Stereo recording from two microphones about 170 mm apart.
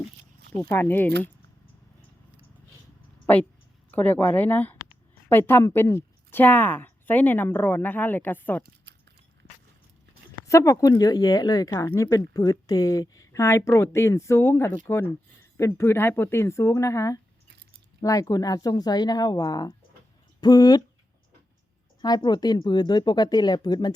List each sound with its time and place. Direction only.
0.6 s a woman's voice: 15° left (ahead or behind)
3.9 s a woman's voice: 10° left (ahead or behind)
8.6 s a sound: 90° right
10.4 s a woman's voice: 20° left (ahead or behind)
22.0 s a woman's voice: 25° left (ahead or behind)